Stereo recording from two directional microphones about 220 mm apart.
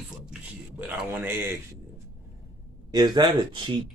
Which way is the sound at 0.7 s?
10° right (ahead or behind).